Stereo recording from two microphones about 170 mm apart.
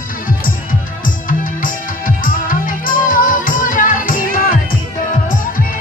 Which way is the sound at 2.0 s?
50° left (ahead or behind).